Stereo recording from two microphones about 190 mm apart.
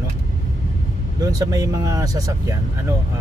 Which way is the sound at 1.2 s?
20° right (ahead or behind).